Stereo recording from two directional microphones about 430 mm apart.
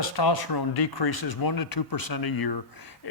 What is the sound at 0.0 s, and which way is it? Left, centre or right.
Speech, left.